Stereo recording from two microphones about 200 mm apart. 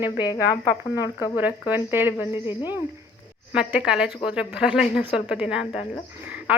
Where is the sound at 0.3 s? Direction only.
20° left (ahead or behind).